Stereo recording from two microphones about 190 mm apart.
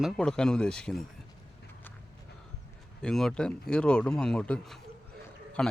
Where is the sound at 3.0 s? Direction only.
5° left (ahead or behind).